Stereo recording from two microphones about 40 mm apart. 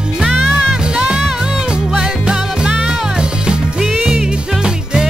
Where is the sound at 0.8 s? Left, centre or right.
Right.